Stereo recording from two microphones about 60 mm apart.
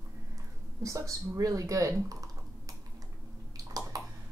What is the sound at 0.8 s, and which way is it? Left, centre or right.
A woman's voice, right.